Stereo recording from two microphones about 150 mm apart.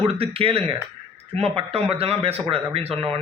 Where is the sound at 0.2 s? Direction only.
40° right (ahead or behind).